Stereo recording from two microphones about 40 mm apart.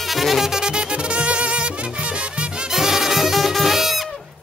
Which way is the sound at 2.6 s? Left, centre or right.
Centre.